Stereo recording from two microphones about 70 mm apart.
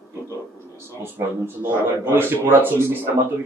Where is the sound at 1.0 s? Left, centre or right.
Right.